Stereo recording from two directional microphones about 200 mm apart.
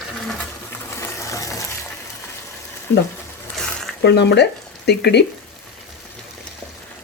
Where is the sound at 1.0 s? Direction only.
15° left (ahead or behind).